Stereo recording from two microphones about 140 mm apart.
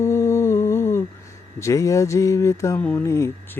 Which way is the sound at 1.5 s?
20° left (ahead or behind).